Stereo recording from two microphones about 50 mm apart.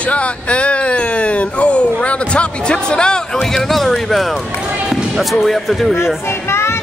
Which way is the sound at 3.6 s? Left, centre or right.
Centre.